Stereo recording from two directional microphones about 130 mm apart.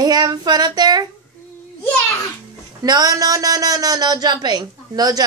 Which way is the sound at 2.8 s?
30° right (ahead or behind).